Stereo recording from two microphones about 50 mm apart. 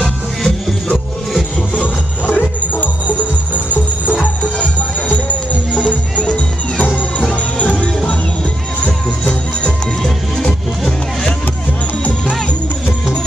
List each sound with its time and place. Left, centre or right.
1.8 s music: left
4.2 s music: left
6.1 s music: left